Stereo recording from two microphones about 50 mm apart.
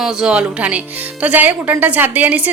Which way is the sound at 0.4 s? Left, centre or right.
Right.